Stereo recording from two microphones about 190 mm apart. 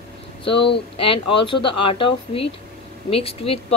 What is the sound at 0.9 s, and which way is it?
Speech, 25° left (ahead or behind).